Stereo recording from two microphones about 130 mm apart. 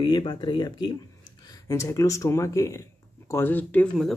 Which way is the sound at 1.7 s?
25° left (ahead or behind).